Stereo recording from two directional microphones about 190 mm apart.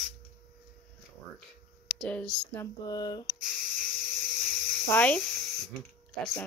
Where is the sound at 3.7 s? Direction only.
45° right (ahead or behind).